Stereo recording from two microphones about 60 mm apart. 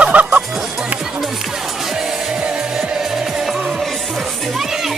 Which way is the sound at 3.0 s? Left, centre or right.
Centre.